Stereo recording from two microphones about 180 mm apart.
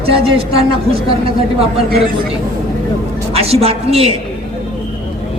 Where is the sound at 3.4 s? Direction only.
35° right (ahead or behind).